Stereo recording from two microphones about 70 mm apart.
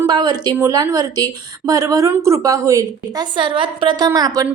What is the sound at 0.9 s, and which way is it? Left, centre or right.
A woman's voice, right.